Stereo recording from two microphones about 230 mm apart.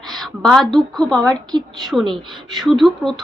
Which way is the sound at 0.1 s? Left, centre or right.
Centre.